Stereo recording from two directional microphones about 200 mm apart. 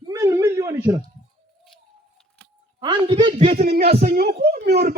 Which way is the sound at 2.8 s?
20° right (ahead or behind).